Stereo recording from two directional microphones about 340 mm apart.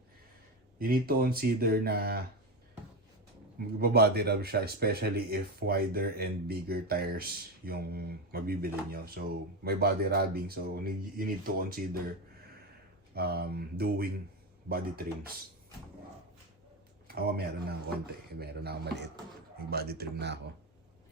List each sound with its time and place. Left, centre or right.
0.8 s speech: right
3.8 s speech: right
13.1 s speech: right
17.2 s speech: right